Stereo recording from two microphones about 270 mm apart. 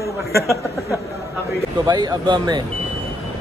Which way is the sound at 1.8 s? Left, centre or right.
Centre.